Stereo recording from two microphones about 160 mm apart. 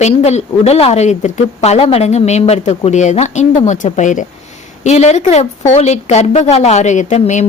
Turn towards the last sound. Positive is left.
turn(degrees=50)  # may be behind; listen again after turning